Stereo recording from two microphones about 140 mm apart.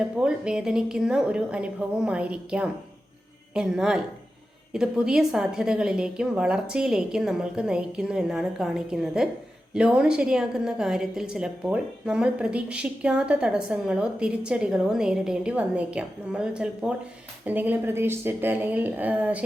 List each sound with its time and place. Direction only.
0.2 s a woman's voice: 5° right (ahead or behind)